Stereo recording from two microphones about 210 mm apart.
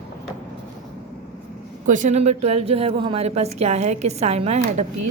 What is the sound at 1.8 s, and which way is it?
A woman's voice, 35° right (ahead or behind).